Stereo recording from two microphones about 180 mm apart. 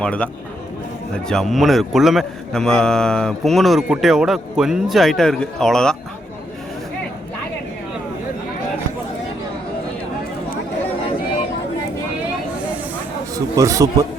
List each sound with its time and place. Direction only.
0.0 s speech: 5° left (ahead or behind)
1.3 s a man's voice: centre (ahead or behind)
13.3 s a man's voice: 20° right (ahead or behind)